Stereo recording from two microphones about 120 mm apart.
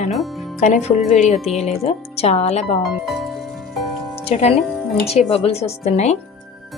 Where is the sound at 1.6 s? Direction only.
60° left (ahead or behind).